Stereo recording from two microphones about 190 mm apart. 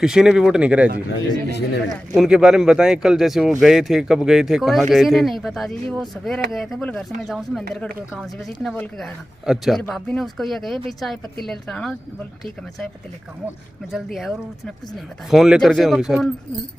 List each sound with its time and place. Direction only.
0.0 s speech: 5° right (ahead or behind)
1.1 s a man's voice: 60° left (ahead or behind)
2.1 s speech: 5° right (ahead or behind)
8.6 s speech: 5° left (ahead or behind)
13.9 s speech: centre (ahead or behind)